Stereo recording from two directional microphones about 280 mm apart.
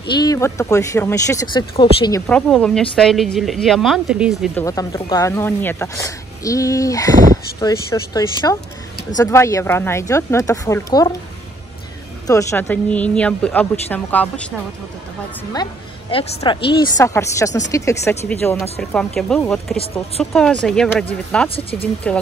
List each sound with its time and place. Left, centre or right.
0.1 s speech: centre
2.2 s speech: centre
4.6 s speech: centre
12.3 s speech: centre
15.5 s speech: centre
21.5 s speech: centre
22.0 s speech: centre